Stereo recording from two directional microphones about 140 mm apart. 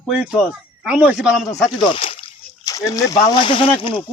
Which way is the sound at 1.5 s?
25° left (ahead or behind).